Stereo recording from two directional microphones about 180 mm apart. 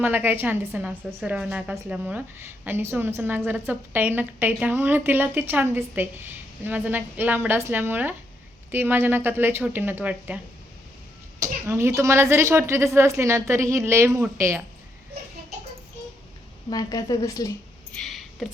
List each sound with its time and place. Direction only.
0.0 s a woman's voice: 10° right (ahead or behind)
16.6 s a woman's voice: 20° left (ahead or behind)
17.9 s a sound: centre (ahead or behind)